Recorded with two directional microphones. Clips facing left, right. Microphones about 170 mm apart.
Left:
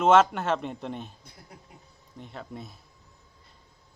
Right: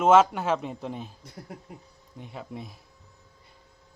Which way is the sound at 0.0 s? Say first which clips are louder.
Right 1 dB; 5° right (ahead or behind).